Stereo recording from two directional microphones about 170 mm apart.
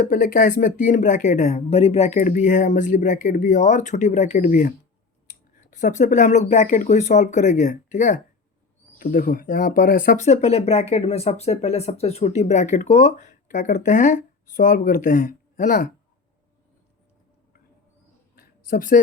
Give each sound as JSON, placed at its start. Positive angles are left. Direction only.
{"t": 0.1, "sound": "speech", "side_deg": 50}
{"t": 5.7, "sound": "speech", "side_deg": 45}
{"t": 18.3, "sound": "a sound", "side_deg": 55}